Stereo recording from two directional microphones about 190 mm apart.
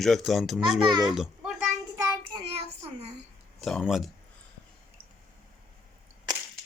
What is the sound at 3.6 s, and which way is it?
Speech, centre (ahead or behind).